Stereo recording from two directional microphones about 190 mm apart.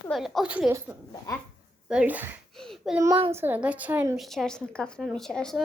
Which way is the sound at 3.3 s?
10° right (ahead or behind).